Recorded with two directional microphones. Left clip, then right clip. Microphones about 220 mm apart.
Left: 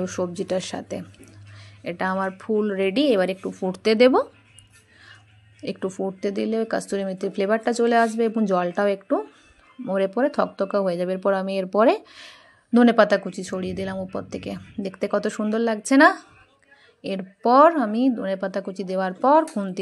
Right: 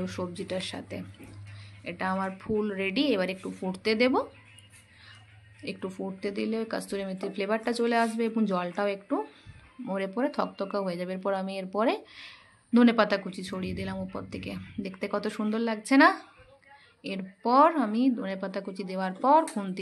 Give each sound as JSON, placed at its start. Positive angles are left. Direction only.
{"t": 0.0, "sound": "speech", "side_deg": 30}
{"t": 5.6, "sound": "speech", "side_deg": 30}
{"t": 19.4, "sound": "speech", "side_deg": 15}